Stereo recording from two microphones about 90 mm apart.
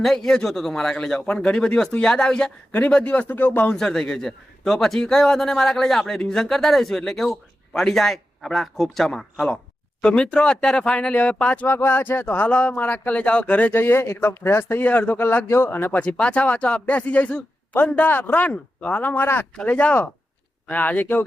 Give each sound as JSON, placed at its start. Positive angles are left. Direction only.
{"t": 0.0, "sound": "speech", "side_deg": 5}
{"t": 3.8, "sound": "a man's voice", "side_deg": 5}
{"t": 19.5, "sound": "speech", "side_deg": 15}